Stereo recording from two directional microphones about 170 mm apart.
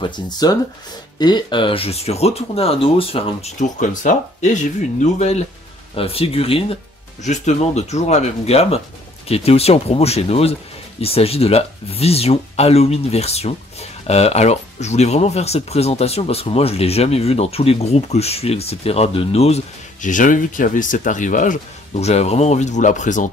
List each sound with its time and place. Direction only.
0.0 s speech: 25° left (ahead or behind); by 23.2 s 45° left (ahead or behind)